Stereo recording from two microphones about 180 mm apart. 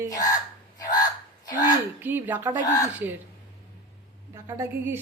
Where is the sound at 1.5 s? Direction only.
20° left (ahead or behind).